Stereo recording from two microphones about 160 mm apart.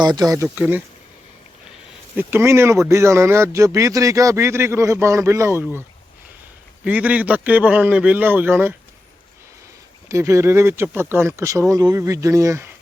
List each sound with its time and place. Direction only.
0.0 s speech: 25° right (ahead or behind)
0.5 s speech: 10° right (ahead or behind)
2.1 s speech: 15° right (ahead or behind)
6.8 s speech: 10° right (ahead or behind)
10.1 s speech: 20° right (ahead or behind)